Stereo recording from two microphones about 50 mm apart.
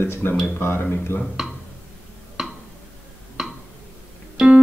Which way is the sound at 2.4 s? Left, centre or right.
Centre.